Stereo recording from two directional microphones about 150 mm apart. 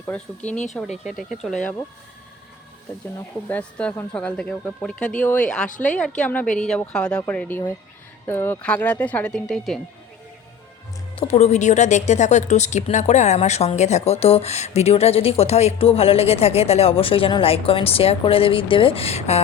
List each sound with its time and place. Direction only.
0.7 s speech: centre (ahead or behind)
3.5 s speech: 5° left (ahead or behind)
5.6 s a woman's voice: 60° left (ahead or behind)
5.9 s speech: 5° left (ahead or behind)
11.1 s speech: 40° left (ahead or behind)